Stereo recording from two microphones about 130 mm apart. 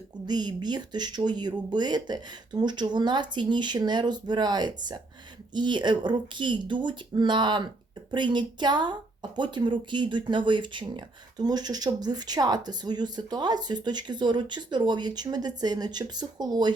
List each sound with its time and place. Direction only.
0.3 s speech: 35° right (ahead or behind)